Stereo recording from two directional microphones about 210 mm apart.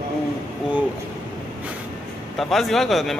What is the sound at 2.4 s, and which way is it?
Speech, centre (ahead or behind).